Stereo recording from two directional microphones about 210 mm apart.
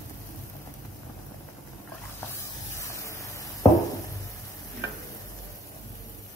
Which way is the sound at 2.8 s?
15° left (ahead or behind).